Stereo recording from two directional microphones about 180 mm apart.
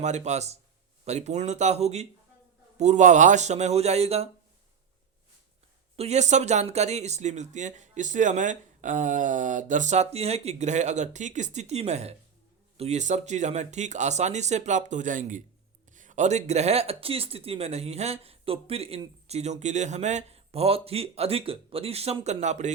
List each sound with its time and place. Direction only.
0.0 s speech: 40° right (ahead or behind)
6.0 s speech: 40° right (ahead or behind)